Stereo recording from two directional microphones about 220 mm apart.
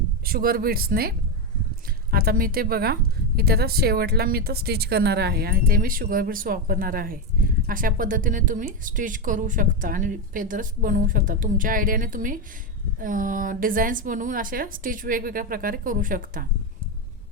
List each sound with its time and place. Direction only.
0.3 s a woman's voice: 45° right (ahead or behind)